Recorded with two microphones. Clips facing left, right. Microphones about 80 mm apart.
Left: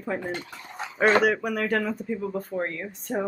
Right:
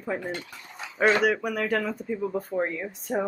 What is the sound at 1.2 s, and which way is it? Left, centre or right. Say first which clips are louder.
Speech: left 1 dB; centre.